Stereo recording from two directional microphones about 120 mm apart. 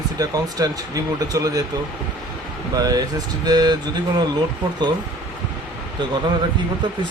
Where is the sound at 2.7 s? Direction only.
30° right (ahead or behind).